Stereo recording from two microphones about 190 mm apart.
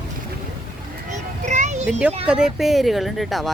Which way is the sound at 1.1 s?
40° right (ahead or behind).